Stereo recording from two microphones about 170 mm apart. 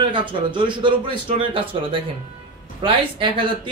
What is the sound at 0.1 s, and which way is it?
A man's voice, 30° right (ahead or behind).